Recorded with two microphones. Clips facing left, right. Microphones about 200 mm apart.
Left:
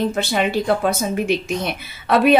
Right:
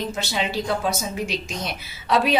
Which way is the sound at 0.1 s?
55° left (ahead or behind).